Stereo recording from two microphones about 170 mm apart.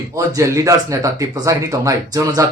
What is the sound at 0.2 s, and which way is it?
Speech, 20° right (ahead or behind).